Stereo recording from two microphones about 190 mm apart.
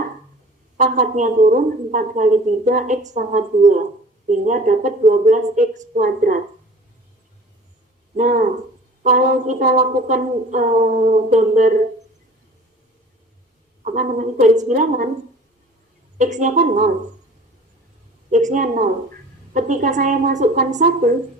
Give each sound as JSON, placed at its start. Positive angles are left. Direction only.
{"t": 0.8, "sound": "a woman's voice", "side_deg": -45}
{"t": 8.1, "sound": "a woman's voice", "side_deg": -45}
{"t": 13.8, "sound": "a woman's voice", "side_deg": -45}
{"t": 16.1, "sound": "a woman's voice", "side_deg": -40}
{"t": 18.3, "sound": "a woman's voice", "side_deg": -40}